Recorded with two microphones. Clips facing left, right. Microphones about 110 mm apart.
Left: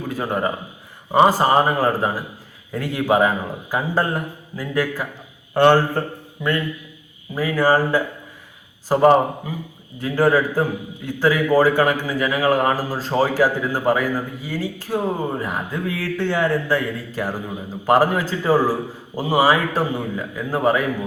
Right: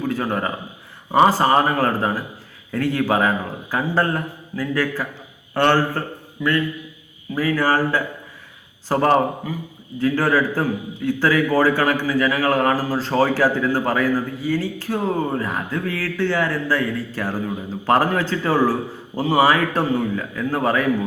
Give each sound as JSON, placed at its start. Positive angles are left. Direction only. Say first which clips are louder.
{"t": 0.1, "sound": "a man's voice", "louder": "left 4 dB", "side_deg": 15}
{"t": 7.3, "sound": "a man's voice", "louder": "left 1 dB", "side_deg": 15}